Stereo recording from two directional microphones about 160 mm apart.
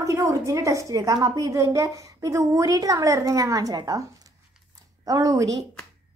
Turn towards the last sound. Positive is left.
turn(degrees=-20)  # may be behind; listen again after turning